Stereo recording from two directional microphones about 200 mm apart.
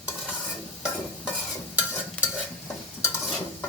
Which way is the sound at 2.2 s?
5° left (ahead or behind).